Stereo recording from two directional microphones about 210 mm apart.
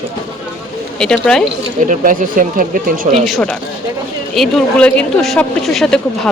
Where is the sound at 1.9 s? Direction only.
40° right (ahead or behind).